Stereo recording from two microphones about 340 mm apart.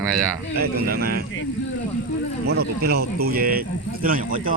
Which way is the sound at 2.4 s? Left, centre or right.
Right.